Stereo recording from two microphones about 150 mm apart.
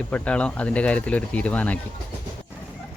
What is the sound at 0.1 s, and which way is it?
Speech, 5° left (ahead or behind).